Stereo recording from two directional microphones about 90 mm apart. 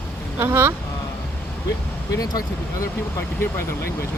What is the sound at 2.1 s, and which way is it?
Speech, 45° left (ahead or behind).